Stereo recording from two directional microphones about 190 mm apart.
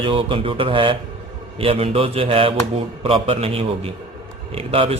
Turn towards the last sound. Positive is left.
turn(degrees=-30)  # may be behind; listen again after turning